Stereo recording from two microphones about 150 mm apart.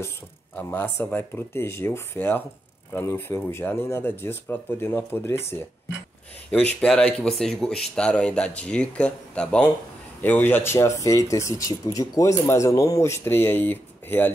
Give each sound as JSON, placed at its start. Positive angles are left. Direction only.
{"t": 0.6, "sound": "speech", "side_deg": 10}